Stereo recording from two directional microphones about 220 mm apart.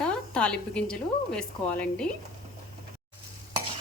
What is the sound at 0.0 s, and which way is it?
Speech, 5° left (ahead or behind).